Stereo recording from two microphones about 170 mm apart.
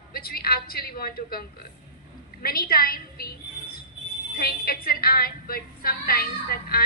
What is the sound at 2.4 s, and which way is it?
Speech, 60° left (ahead or behind).